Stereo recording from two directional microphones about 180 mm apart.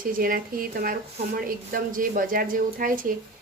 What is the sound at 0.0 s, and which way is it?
A woman's voice, 50° right (ahead or behind).